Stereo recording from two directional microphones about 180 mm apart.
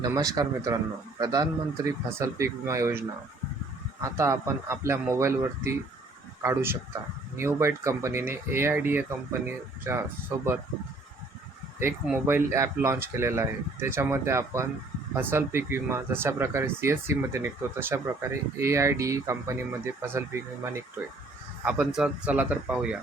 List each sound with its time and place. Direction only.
0.0 s a man's voice: 20° right (ahead or behind)
4.0 s speech: 15° right (ahead or behind)
12.0 s speech: 10° right (ahead or behind)
21.6 s speech: 5° right (ahead or behind)